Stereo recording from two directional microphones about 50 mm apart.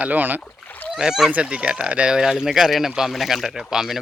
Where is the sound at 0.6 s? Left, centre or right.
Left.